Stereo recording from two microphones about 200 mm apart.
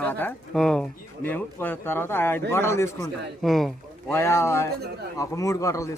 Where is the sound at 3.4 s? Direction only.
Centre (ahead or behind).